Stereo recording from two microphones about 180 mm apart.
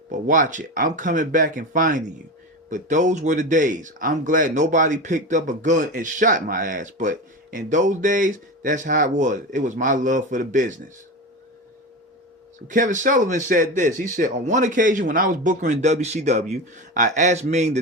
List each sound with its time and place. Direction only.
0.1 s speech: 45° right (ahead or behind)
12.6 s speech: 45° right (ahead or behind)